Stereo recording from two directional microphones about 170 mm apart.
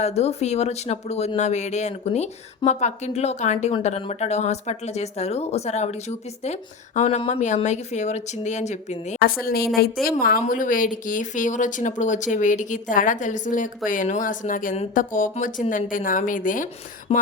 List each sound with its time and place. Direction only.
0.0 s speech: 40° left (ahead or behind)
9.2 s a woman's voice: 65° left (ahead or behind)
17.1 s speech: 40° left (ahead or behind)